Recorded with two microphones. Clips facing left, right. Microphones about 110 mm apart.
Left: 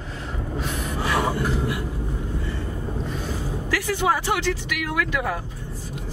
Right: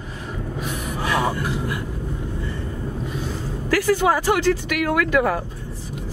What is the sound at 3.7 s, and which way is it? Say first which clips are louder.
Speech: right 5 dB; 40° right (ahead or behind).